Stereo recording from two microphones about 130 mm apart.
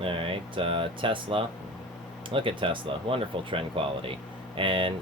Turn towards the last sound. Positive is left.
turn(degrees=-40)  # may be behind; listen again after turning